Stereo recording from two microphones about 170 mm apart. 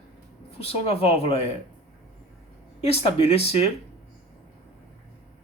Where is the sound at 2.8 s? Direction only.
40° left (ahead or behind).